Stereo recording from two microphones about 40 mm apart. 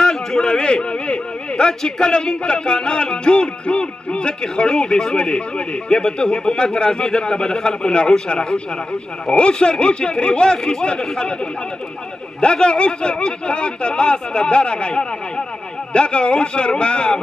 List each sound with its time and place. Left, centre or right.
0.0 s a man's voice: centre
12.4 s a man's voice: left